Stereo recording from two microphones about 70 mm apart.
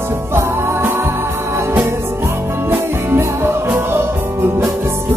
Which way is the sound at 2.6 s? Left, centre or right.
Right.